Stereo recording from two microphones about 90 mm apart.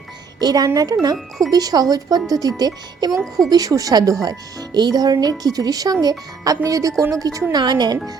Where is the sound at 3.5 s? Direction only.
40° right (ahead or behind).